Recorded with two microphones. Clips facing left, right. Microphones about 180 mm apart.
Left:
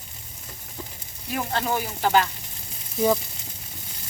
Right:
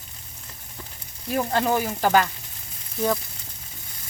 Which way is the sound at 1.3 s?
40° right (ahead or behind).